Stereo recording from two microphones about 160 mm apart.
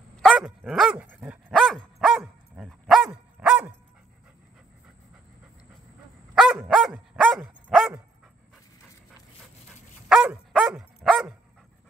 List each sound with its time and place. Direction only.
0.2 s dog: centre (ahead or behind)
1.5 s dog: centre (ahead or behind)
6.3 s dog: centre (ahead or behind)
10.0 s dog: 5° right (ahead or behind)